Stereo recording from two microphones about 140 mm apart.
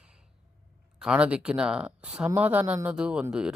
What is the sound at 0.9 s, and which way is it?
Speech, 5° right (ahead or behind).